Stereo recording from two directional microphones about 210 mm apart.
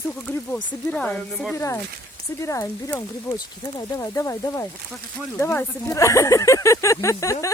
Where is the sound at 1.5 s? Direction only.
15° left (ahead or behind).